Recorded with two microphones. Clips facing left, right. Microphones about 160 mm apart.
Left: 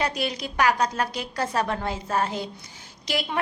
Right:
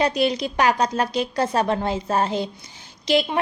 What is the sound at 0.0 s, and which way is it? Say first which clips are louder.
A woman's voice: right 7 dB; 25° right (ahead or behind).